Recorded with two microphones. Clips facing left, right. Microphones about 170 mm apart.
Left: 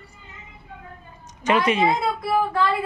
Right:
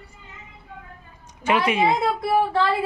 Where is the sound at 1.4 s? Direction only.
10° right (ahead or behind).